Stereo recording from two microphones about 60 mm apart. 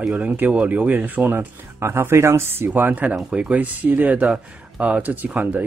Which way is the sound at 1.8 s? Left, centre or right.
Right.